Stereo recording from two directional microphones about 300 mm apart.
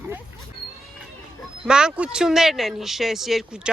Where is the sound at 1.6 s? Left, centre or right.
Centre.